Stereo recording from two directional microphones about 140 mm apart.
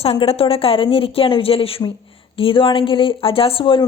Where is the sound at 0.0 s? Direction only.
45° left (ahead or behind).